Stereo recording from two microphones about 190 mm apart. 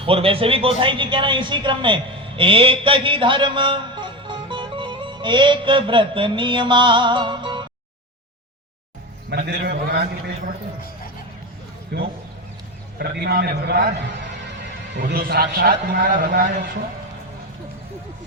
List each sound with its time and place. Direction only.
0.0 s a man's voice: 30° right (ahead or behind)
9.5 s a man's voice: 60° right (ahead or behind)
11.9 s a man's voice: 55° right (ahead or behind)
14.9 s a man's voice: 55° right (ahead or behind)